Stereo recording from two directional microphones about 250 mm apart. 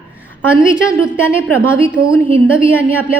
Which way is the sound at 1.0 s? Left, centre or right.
Centre.